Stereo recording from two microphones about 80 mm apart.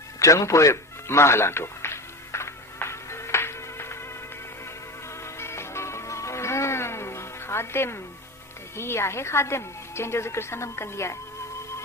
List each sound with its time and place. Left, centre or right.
0.2 s music: left
5.2 s music: left
8.7 s a woman's voice: left